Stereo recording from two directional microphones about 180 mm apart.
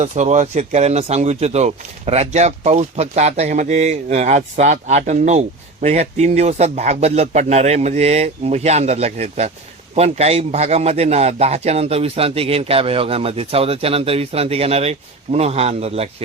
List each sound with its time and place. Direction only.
0.0 s speech: 40° right (ahead or behind)